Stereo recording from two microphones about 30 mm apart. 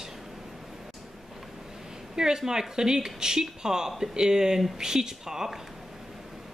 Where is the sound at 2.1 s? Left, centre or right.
Right.